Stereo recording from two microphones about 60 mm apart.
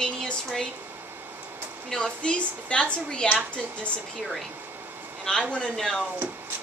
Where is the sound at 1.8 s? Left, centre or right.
Centre.